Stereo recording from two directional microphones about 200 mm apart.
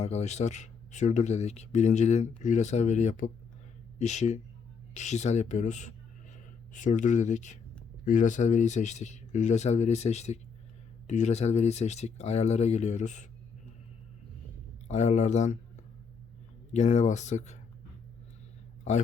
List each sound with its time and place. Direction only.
0.0 s speech: 30° left (ahead or behind)
14.8 s speech: 35° left (ahead or behind)
16.7 s speech: 35° left (ahead or behind)